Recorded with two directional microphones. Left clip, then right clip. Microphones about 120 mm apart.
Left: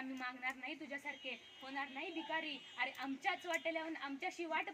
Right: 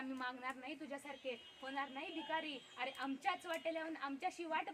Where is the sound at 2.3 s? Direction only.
20° right (ahead or behind).